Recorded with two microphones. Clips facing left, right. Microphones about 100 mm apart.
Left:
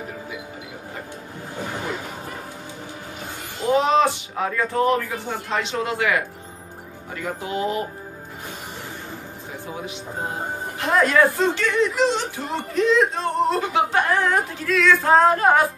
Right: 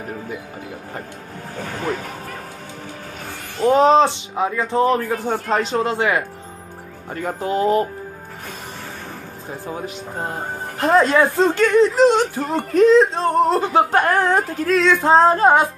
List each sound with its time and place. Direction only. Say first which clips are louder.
1.6 s a sound: right 4 dB; 15° left (ahead or behind)
3.6 s speech: right 5 dB; 40° right (ahead or behind); by 4.8 s 20° right (ahead or behind)
4.8 s speech: right 3 dB; 35° right (ahead or behind)
7.2 s speech: right 5 dB; 40° right (ahead or behind)
9.7 s speech: right 3 dB; 45° right (ahead or behind)
10.8 s speech: right 3 dB; 30° right (ahead or behind)
11.5 s speech: right 7 dB; 40° right (ahead or behind)
14.8 s speech: right 2 dB; 25° right (ahead or behind)